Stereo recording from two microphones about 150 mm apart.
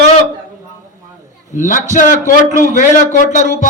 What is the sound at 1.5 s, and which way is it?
A man's voice, 55° left (ahead or behind).